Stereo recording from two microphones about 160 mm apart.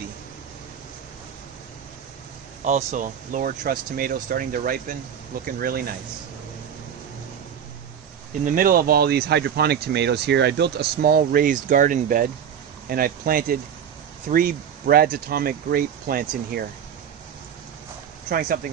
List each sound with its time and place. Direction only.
2.6 s speech: 50° right (ahead or behind); by 5.9 s 70° right (ahead or behind)
8.5 s speech: 60° right (ahead or behind)
18.3 s speech: 60° right (ahead or behind)